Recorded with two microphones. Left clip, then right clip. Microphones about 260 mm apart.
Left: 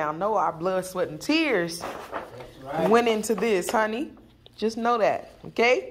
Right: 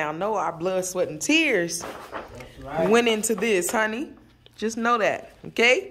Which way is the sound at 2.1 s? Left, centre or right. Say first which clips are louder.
Left 1 dB; left.